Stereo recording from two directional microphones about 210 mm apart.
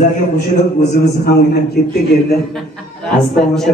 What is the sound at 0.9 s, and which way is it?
Speech, 50° left (ahead or behind).